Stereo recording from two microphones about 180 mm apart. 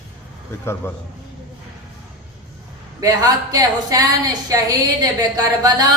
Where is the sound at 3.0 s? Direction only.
20° right (ahead or behind).